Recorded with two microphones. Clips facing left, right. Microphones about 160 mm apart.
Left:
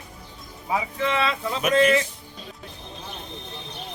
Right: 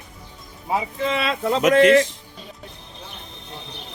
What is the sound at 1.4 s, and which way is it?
Speech, 75° right (ahead or behind).